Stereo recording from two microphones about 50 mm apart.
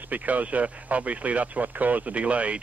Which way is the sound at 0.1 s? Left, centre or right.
Right.